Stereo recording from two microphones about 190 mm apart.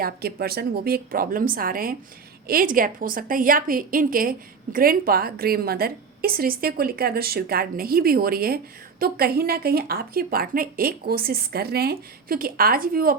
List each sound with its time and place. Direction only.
0.0 s a woman's voice: 55° right (ahead or behind)